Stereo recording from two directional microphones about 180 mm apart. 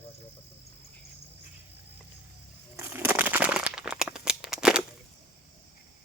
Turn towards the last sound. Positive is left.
turn(degrees=-5)  # may be behind; listen again after turning